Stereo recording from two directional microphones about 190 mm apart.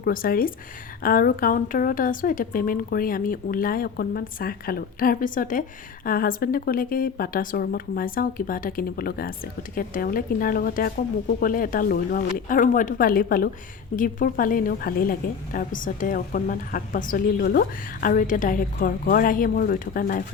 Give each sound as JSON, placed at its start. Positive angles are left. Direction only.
{"t": 0.0, "sound": "a woman's voice", "side_deg": 50}